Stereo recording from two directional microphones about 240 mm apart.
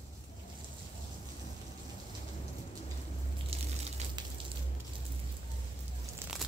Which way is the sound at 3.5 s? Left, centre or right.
Right.